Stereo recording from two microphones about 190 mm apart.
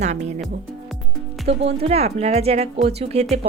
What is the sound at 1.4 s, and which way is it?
Speech, 30° right (ahead or behind).